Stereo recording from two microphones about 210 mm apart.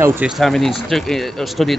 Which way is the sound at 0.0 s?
10° right (ahead or behind).